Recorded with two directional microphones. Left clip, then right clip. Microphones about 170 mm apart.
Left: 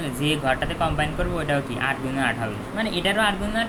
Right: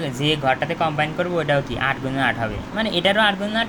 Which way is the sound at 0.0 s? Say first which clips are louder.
Right 3 dB; 30° right (ahead or behind).